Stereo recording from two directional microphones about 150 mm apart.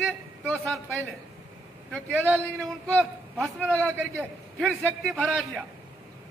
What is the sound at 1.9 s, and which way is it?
Speech, 10° right (ahead or behind).